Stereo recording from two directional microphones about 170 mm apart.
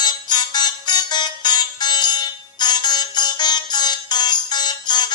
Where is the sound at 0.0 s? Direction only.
25° left (ahead or behind).